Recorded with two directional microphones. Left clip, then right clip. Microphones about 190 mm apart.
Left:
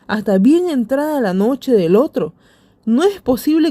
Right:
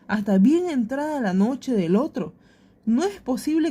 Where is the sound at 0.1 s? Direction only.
35° left (ahead or behind).